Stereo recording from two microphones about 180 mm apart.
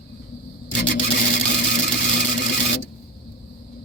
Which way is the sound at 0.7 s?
60° left (ahead or behind).